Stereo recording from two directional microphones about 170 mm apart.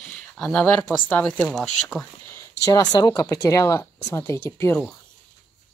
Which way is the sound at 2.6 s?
20° left (ahead or behind).